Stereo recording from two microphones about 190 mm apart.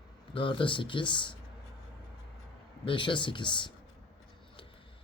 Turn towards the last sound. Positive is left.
turn(degrees=25)  # may be behind; listen again after turning